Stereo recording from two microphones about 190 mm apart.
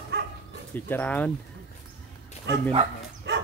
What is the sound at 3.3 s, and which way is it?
Dog, 65° right (ahead or behind).